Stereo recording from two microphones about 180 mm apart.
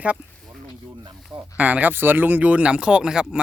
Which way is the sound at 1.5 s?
10° right (ahead or behind).